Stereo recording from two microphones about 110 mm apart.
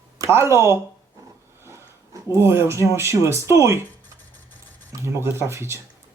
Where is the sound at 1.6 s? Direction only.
25° right (ahead or behind).